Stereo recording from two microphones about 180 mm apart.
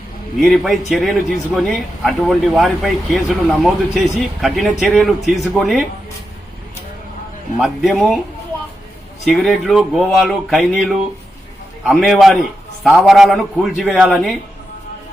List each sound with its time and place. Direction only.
0.3 s speech: centre (ahead or behind)
7.6 s speech: centre (ahead or behind)
9.2 s speech: centre (ahead or behind)